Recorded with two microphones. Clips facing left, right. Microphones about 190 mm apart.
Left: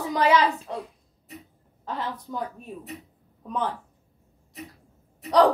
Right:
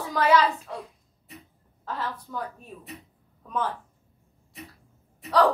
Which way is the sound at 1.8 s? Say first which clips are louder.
Left 1 dB; 20° left (ahead or behind).